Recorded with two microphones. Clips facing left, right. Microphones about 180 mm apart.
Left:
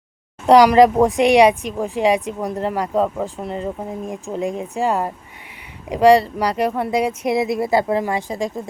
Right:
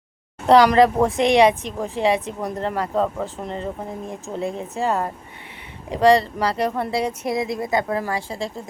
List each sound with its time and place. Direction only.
0.4 s speech: 15° left (ahead or behind)
7.3 s speech: 25° left (ahead or behind)